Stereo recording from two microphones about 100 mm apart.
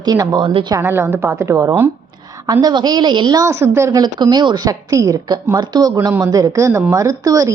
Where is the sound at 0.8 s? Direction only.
25° right (ahead or behind).